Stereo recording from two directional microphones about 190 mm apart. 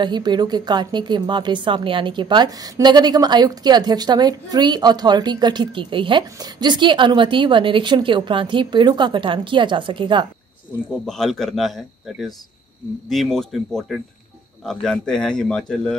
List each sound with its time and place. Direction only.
0.0 s a woman's voice: 20° right (ahead or behind)
11.1 s speech: centre (ahead or behind)